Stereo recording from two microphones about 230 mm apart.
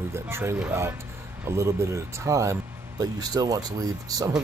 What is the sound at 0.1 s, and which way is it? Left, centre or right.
Speech, centre.